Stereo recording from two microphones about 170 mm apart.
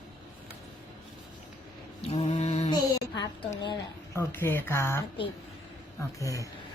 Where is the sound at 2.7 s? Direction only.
25° left (ahead or behind).